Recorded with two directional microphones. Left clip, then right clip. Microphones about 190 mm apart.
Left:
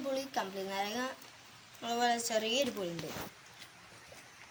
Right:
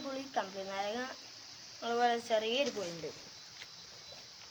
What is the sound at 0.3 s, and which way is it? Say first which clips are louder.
A woman's voice: left 1 dB; centre (ahead or behind).